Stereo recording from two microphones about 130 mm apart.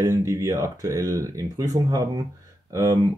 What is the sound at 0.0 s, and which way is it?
Speech, 25° right (ahead or behind).